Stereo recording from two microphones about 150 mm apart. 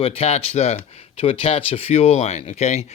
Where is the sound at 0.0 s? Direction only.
45° left (ahead or behind).